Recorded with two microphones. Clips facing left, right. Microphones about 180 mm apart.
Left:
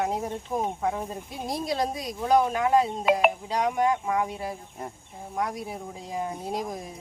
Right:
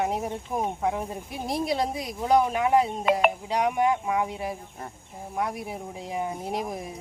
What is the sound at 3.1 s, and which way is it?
Speech, 5° left (ahead or behind).